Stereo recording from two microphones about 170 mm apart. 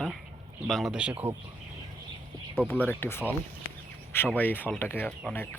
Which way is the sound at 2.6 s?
10° left (ahead or behind).